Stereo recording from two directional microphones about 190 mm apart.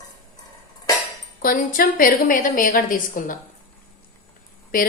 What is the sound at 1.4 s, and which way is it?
A woman's voice, 50° left (ahead or behind).